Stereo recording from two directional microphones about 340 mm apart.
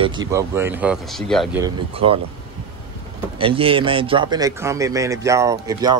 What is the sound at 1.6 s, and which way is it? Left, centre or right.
Speech, centre.